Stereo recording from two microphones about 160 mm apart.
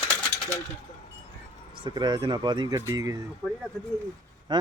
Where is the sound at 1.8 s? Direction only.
25° right (ahead or behind).